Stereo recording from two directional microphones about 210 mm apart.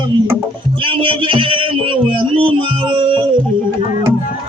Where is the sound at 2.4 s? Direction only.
25° right (ahead or behind).